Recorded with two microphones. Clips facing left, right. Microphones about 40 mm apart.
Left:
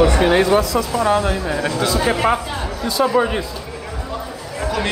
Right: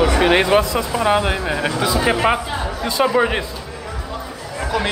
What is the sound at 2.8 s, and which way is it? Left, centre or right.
Speech, right.